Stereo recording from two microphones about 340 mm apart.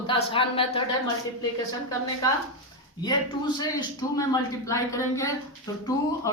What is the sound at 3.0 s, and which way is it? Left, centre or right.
Speech, centre.